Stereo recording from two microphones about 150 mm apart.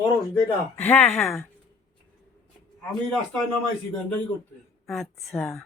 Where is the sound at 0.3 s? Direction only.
10° left (ahead or behind).